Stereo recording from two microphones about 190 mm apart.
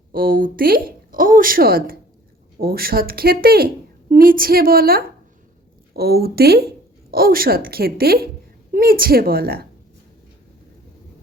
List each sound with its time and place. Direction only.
0.1 s speech: 50° right (ahead or behind)